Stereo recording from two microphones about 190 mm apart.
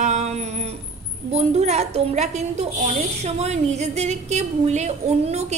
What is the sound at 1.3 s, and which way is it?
A woman's voice, 35° right (ahead or behind).